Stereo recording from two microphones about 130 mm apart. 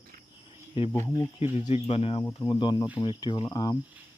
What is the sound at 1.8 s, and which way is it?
Speech, 50° left (ahead or behind).